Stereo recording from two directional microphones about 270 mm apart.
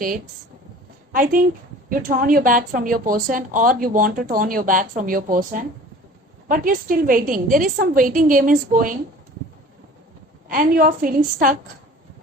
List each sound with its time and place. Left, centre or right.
1.1 s a woman's voice: right
10.5 s a woman's voice: right